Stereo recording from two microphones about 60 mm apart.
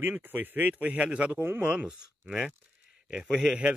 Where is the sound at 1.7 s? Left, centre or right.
Right.